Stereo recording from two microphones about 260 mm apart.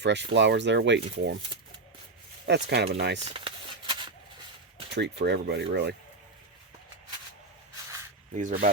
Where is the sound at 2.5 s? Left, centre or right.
Right.